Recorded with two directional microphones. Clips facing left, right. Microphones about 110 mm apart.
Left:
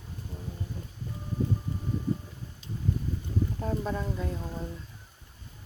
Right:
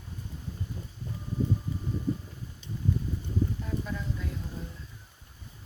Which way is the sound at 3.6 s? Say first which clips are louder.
Left 4 dB; 40° left (ahead or behind).